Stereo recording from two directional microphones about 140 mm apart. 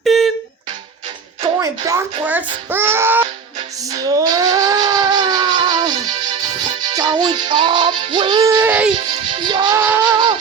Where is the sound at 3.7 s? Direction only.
25° right (ahead or behind).